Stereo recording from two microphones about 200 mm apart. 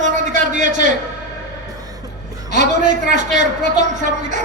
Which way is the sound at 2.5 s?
40° right (ahead or behind).